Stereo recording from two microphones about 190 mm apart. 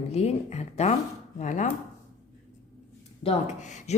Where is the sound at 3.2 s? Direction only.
35° left (ahead or behind).